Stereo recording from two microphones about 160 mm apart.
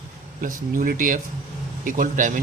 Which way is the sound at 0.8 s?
60° right (ahead or behind).